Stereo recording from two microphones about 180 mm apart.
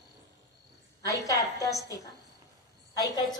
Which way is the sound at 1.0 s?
20° left (ahead or behind).